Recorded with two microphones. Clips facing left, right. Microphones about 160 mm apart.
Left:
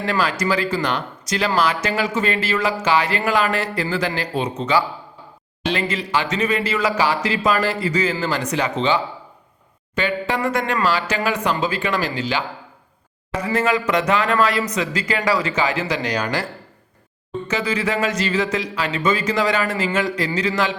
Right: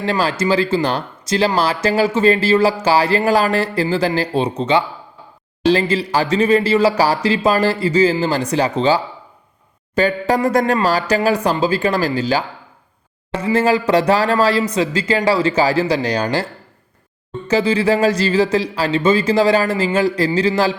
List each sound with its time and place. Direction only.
0.0 s speech: 30° right (ahead or behind)
17.5 s speech: 30° right (ahead or behind)